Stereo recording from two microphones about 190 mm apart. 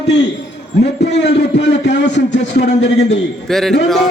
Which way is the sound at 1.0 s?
60° left (ahead or behind).